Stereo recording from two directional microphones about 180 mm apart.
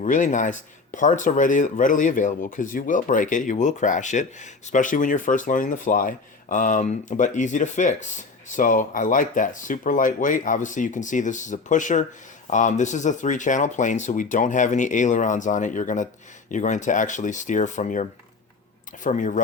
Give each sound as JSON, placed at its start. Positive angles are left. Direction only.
{"t": 0.0, "sound": "speech", "side_deg": 45}